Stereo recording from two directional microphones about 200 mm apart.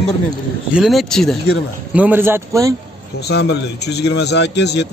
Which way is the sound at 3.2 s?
55° left (ahead or behind).